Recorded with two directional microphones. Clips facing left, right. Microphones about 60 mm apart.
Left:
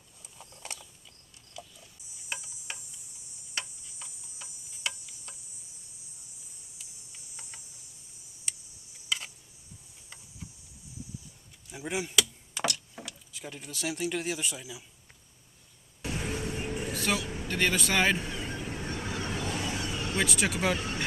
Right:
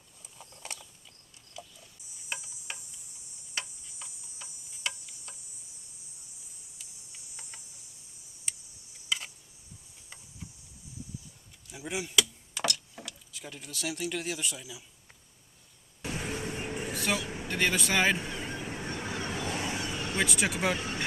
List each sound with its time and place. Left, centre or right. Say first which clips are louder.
0.3 s mechanisms: even; centre
1.6 s a sound: even; centre
2.3 s cricket: even; centre
8.5 s a sound: even; centre
11.7 s speech: left 2 dB; left
12.5 s speech: left 1 dB; centre
16.1 s vehicle: left 1 dB; centre
16.9 s vehicle: left 1 dB; centre
17.2 s speech: left 1 dB; right
17.6 s speech: even; centre
18.2 s vehicle: even; right
20.2 s speech: even; centre